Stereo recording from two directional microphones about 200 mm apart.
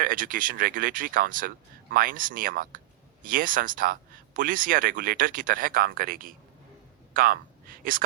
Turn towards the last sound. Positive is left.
turn(degrees=-45)  # may be behind; listen again after turning